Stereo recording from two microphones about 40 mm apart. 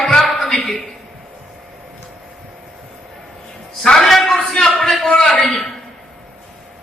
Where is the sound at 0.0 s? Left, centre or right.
Centre.